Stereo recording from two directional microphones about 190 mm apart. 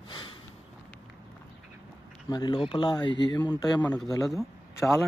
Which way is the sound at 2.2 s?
25° left (ahead or behind).